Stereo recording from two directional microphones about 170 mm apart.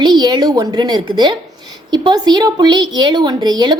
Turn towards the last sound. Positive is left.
turn(degrees=-25)  # may be behind; listen again after turning